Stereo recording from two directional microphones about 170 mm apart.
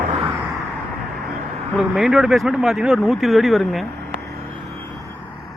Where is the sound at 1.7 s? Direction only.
5° right (ahead or behind).